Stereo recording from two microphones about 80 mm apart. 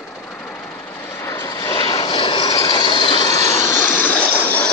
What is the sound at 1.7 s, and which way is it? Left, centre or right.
Vehicle, left.